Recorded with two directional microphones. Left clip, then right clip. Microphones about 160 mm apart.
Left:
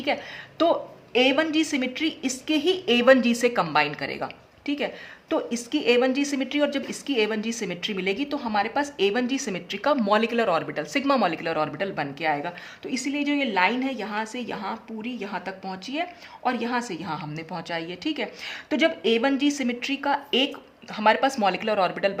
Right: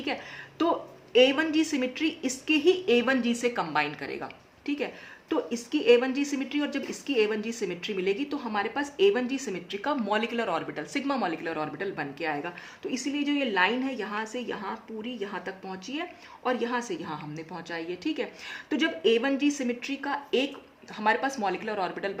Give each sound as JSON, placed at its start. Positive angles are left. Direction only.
{"t": 0.6, "sound": "a woman's voice", "side_deg": 25}